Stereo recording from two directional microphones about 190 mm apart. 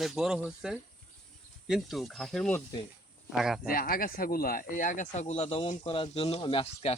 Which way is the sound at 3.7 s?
50° left (ahead or behind).